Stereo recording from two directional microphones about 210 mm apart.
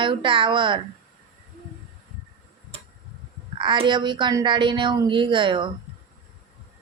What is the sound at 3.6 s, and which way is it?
Speech, 20° right (ahead or behind).